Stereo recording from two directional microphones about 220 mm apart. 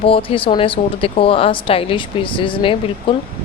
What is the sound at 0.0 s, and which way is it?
Speech, 25° left (ahead or behind).